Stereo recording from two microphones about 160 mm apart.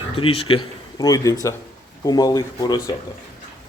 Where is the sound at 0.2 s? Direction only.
35° left (ahead or behind).